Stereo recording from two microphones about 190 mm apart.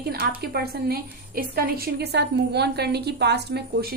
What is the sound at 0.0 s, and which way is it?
A woman's voice, 55° right (ahead or behind).